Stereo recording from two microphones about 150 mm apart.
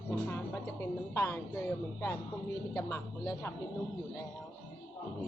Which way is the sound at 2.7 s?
20° left (ahead or behind).